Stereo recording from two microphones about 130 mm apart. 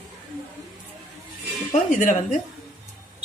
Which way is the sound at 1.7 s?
85° left.